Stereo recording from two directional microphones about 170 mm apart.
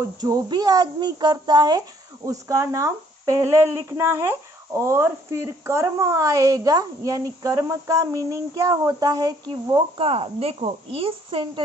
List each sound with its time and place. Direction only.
0.0 s a woman's voice: 20° right (ahead or behind)